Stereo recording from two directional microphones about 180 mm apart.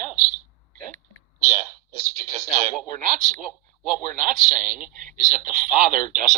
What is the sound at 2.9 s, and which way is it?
Speech, 45° right (ahead or behind).